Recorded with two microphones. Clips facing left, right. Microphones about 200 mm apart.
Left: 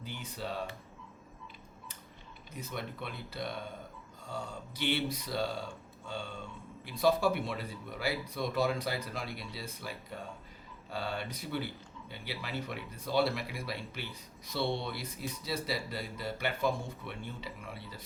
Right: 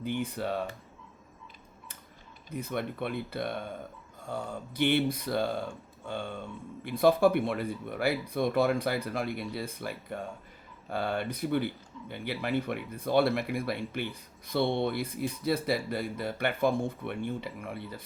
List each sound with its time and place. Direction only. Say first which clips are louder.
0.0 s speech: right 9 dB; 55° right (ahead or behind)
2.5 s speech: right 7 dB; 55° right (ahead or behind)